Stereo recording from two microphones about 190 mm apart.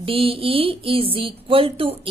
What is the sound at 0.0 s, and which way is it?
Speech, 30° right (ahead or behind).